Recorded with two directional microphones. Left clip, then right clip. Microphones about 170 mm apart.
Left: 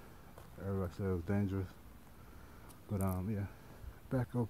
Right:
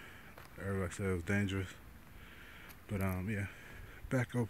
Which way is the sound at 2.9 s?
Centre (ahead or behind).